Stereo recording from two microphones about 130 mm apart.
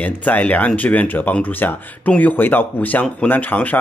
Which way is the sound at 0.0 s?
10° left (ahead or behind).